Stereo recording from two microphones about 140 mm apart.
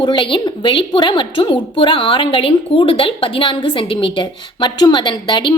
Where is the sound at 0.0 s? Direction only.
35° left (ahead or behind).